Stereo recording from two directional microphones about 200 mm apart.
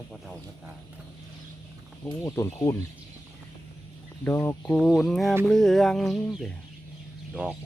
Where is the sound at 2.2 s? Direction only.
15° left (ahead or behind).